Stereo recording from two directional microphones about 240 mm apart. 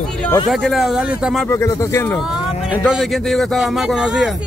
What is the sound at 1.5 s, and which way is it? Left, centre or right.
Speech, centre.